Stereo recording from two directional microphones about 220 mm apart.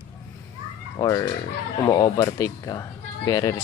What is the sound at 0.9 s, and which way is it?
Speech, 15° left (ahead or behind).